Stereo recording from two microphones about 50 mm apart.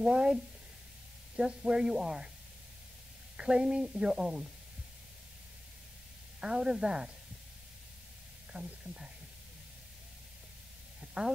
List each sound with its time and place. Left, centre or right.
0.0 s a woman's voice: centre
3.3 s a woman's voice: centre
6.4 s a woman's voice: centre
8.5 s a woman's voice: centre
11.2 s speech: right